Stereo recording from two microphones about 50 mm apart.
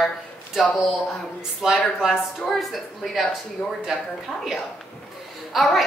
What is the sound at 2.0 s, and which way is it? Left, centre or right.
A woman's voice, centre.